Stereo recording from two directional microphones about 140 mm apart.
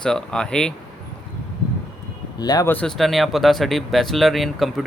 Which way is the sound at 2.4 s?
30° left (ahead or behind).